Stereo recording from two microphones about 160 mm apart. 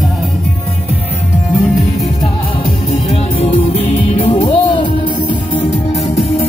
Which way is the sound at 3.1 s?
40° left (ahead or behind).